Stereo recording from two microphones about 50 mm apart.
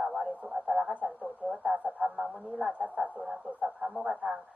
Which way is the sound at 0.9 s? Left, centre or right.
Right.